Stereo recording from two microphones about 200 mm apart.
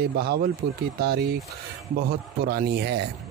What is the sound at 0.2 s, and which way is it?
A man's voice, 50° right (ahead or behind).